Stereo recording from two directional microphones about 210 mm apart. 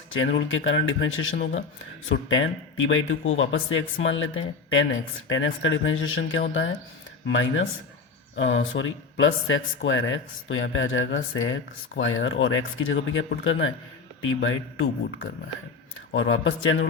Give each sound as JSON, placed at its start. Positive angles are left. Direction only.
{"t": 0.2, "sound": "speech", "side_deg": 65}
{"t": 1.4, "sound": "speech", "side_deg": 50}
{"t": 2.0, "sound": "speech", "side_deg": 70}